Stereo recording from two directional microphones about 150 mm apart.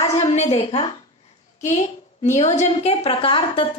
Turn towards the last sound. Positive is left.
turn(degrees=35)  # may be behind; listen again after turning